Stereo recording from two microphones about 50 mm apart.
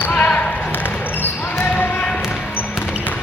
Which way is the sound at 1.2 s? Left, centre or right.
Left.